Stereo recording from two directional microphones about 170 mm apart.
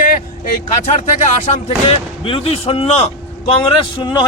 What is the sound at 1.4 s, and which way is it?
Speech, 35° left (ahead or behind).